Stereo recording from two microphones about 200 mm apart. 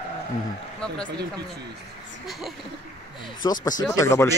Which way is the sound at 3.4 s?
20° left (ahead or behind).